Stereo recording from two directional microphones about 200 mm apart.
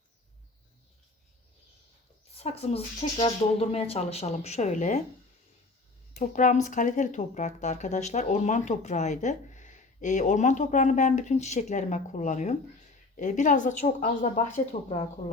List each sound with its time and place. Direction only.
2.3 s speech: 30° left (ahead or behind)
6.1 s speech: 40° left (ahead or behind)